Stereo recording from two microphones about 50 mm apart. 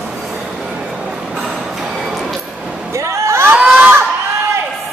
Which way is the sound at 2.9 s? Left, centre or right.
Right.